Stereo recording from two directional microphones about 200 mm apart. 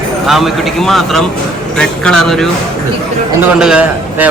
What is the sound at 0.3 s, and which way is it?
A man's voice, centre (ahead or behind).